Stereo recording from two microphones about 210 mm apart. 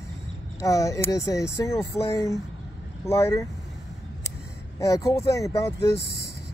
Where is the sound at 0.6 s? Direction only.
15° left (ahead or behind).